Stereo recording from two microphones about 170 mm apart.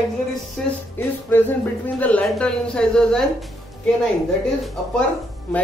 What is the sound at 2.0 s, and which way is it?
Speech, 10° left (ahead or behind).